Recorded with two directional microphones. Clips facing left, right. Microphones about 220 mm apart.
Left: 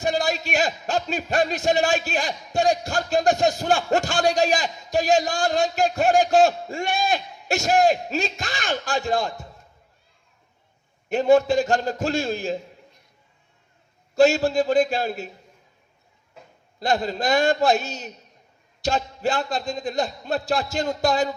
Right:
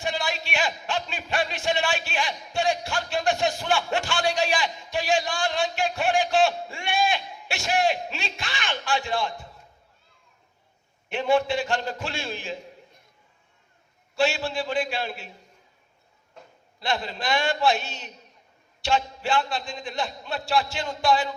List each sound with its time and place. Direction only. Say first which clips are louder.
0.0 s a man's voice: left 6 dB; 40° left (ahead or behind)
11.1 s a man's voice: left 6 dB; 40° left (ahead or behind)
14.2 s a man's voice: left 8 dB; 40° left (ahead or behind)
16.4 s a sound: even; 5° left (ahead or behind)
16.8 s a man's voice: left 6 dB; 40° left (ahead or behind)